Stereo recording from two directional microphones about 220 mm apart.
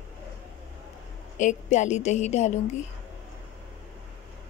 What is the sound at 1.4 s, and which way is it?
A woman's voice, 35° left (ahead or behind).